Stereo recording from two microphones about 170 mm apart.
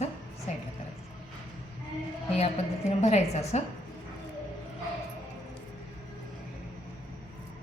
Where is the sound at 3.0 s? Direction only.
40° left (ahead or behind).